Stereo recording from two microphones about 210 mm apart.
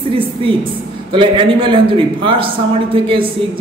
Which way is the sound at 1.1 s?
25° right (ahead or behind).